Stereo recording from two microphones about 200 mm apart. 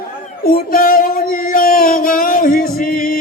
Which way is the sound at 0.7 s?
45° left (ahead or behind).